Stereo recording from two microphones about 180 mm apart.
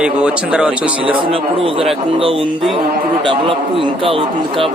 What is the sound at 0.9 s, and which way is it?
A man's voice, 30° right (ahead or behind).